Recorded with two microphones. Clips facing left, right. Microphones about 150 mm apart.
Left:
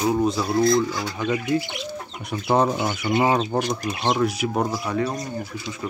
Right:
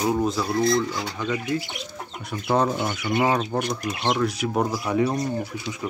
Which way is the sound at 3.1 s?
20° left (ahead or behind).